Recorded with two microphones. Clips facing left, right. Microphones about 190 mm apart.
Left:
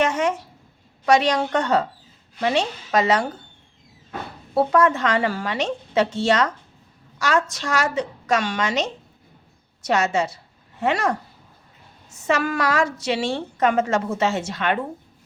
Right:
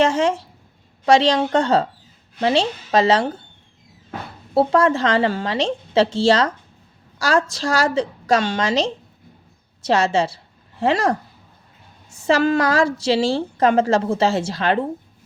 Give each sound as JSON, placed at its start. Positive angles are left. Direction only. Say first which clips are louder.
{"t": 0.0, "sound": "a woman's voice", "louder": "right 4 dB", "side_deg": -30}
{"t": 4.5, "sound": "a woman's voice", "louder": "right 2 dB", "side_deg": -30}